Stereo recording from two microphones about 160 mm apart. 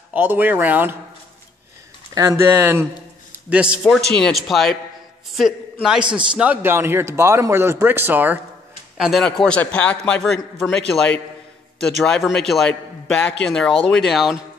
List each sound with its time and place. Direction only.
0.1 s speech: 10° right (ahead or behind)
2.1 s a man's voice: 20° right (ahead or behind); by 10.8 s centre (ahead or behind)
12.0 s a man's voice: 5° left (ahead or behind)